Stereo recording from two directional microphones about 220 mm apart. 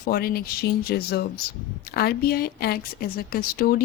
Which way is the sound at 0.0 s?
40° left (ahead or behind).